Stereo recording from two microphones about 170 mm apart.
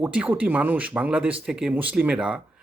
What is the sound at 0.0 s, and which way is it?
Speech, 10° right (ahead or behind).